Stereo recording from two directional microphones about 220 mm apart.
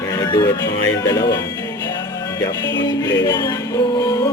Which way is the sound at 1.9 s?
15° left (ahead or behind).